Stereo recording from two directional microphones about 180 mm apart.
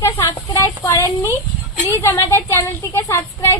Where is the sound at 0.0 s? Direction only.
15° left (ahead or behind).